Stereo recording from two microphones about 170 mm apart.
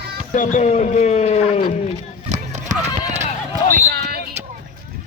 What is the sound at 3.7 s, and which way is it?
Basketball bounce, 60° right (ahead or behind).